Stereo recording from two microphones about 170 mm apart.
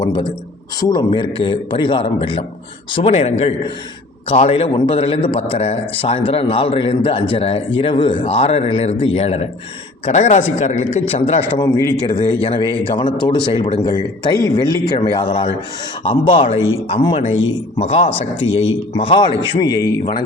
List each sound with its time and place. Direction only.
0.0 s a man's voice: 25° left (ahead or behind)
11.6 s speech: 20° left (ahead or behind)